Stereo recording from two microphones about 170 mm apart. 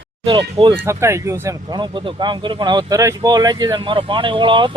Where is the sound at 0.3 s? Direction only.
30° right (ahead or behind).